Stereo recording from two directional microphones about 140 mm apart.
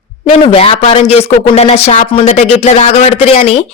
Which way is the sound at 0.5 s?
45° left (ahead or behind).